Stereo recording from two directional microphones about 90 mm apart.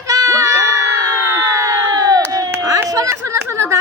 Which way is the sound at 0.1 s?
40° right (ahead or behind).